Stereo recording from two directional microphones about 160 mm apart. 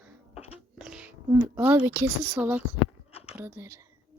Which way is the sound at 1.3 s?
15° right (ahead or behind).